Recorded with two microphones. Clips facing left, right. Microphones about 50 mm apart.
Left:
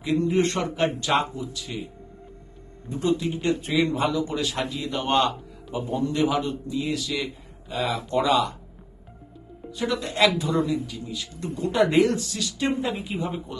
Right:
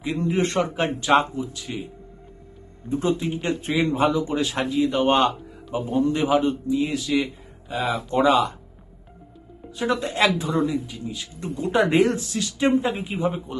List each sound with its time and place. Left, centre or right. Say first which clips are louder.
0.3 s a man's voice: right 1 dB; right
2.9 s a man's voice: right 1 dB; right
5.8 s a man's voice: right 2 dB; right
7.7 s a man's voice: right 1 dB; centre
9.7 s speech: right 2 dB; right